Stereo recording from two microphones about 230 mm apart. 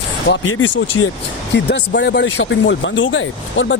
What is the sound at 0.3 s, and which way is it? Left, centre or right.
Speech, left.